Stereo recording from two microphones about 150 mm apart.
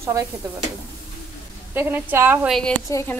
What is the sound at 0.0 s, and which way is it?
Stir, 20° right (ahead or behind).